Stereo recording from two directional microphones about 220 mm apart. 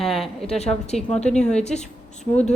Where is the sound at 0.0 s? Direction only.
Centre (ahead or behind).